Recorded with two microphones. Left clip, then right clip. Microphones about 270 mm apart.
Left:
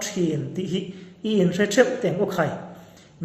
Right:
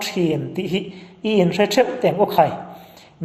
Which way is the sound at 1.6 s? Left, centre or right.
Right.